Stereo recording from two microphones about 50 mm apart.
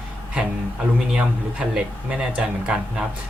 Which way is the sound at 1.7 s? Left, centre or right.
Centre.